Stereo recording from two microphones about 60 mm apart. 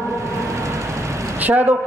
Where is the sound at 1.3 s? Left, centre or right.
Right.